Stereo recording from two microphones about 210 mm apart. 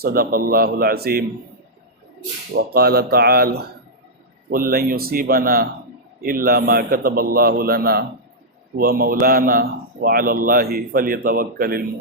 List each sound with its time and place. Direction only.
0.0 s a man's voice: 45° right (ahead or behind)
2.6 s a man's voice: 50° right (ahead or behind)